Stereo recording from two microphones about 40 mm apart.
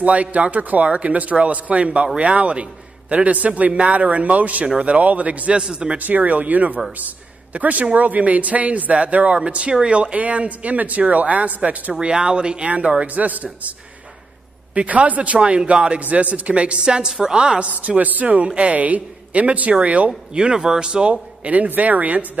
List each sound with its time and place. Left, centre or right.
0.0 s speech: right
0.8 s a man's voice: right
5.6 s a man's voice: right
5.9 s a man's voice: right
12.0 s a man's voice: right
13.0 s speech: right
16.8 s a man's voice: centre
17.6 s speech: right
20.5 s a man's voice: centre; by 21.6 s right
21.6 s speech: right